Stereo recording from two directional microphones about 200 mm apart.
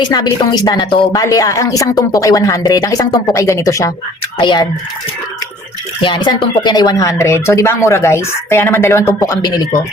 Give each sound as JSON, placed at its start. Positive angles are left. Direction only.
{"t": 0.0, "sound": "a woman's voice", "side_deg": 20}
{"t": 6.0, "sound": "a woman's voice", "side_deg": 25}